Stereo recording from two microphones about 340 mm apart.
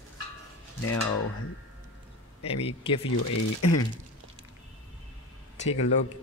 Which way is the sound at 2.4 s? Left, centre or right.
Centre.